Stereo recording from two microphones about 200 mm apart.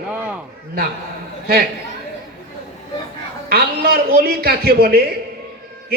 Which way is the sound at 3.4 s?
50° right (ahead or behind).